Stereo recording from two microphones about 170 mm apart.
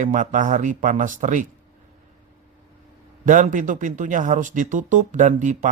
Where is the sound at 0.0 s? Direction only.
45° right (ahead or behind).